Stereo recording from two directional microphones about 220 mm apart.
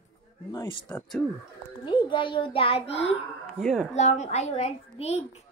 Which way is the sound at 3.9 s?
30° left (ahead or behind).